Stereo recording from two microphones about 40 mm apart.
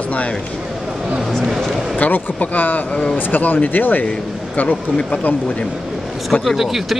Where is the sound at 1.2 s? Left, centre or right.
Centre.